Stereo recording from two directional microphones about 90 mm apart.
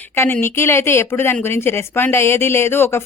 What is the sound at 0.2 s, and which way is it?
A woman's voice, 25° left (ahead or behind).